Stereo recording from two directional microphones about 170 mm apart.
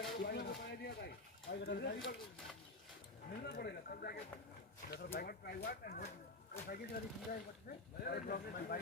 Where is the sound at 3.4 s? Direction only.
70° left (ahead or behind).